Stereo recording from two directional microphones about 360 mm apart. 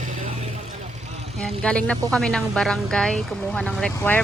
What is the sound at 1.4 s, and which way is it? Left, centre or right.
Speech, centre.